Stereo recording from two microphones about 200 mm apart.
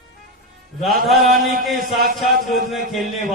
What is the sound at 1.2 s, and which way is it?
Speech, 45° right (ahead or behind).